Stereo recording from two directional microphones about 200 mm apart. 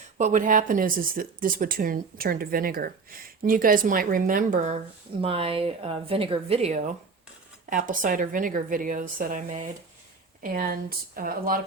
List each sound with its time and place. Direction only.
0.2 s speech: 40° right (ahead or behind)
5.2 s a woman's voice: 30° right (ahead or behind); by 11.6 s 45° right (ahead or behind)